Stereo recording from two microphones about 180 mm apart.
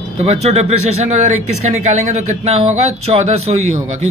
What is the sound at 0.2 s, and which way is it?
Speech, 40° right (ahead or behind).